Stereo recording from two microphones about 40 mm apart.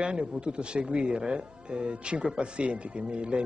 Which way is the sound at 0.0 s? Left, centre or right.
Right.